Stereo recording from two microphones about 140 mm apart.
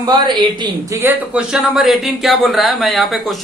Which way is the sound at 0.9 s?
10° right (ahead or behind).